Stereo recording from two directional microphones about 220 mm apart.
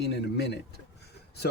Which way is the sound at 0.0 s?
50° left (ahead or behind).